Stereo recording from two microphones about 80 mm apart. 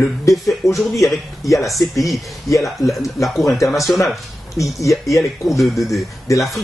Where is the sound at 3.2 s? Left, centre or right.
Centre.